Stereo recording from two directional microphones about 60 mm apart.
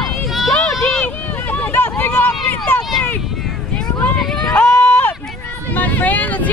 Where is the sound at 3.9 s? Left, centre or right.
Left.